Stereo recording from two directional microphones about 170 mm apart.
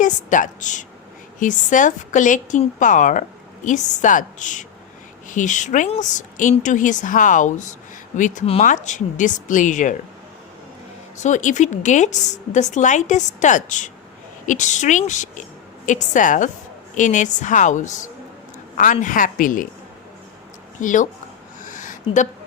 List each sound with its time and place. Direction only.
0.0 s a woman's voice: 45° left (ahead or behind)
11.2 s a woman's voice: 45° left (ahead or behind)
20.8 s a woman's voice: 50° left (ahead or behind)
21.6 s a sound: 50° left (ahead or behind)